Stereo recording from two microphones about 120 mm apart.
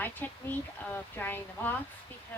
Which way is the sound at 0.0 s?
15° left (ahead or behind).